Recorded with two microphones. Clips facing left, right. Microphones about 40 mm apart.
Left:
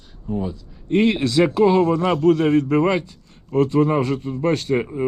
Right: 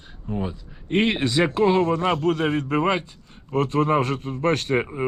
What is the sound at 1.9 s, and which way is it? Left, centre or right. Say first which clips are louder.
Speech: left 5 dB; right.